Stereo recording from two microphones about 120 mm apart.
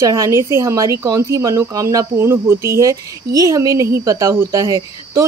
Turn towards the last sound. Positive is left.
turn(degrees=-30)  # may be behind; listen again after turning